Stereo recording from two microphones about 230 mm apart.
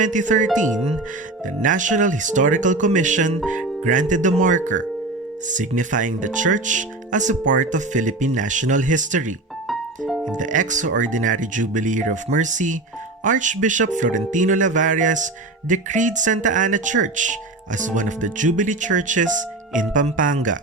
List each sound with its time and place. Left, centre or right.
0.0 s speech: right
9.6 s music: centre
10.3 s speech: right